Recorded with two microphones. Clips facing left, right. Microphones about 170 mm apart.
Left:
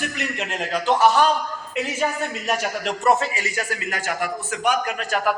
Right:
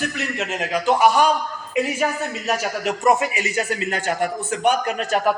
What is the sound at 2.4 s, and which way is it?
A man's voice, 5° right (ahead or behind).